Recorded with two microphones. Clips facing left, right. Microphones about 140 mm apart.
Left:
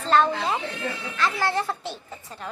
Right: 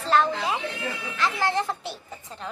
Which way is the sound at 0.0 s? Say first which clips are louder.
Left 2 dB; 10° right (ahead or behind).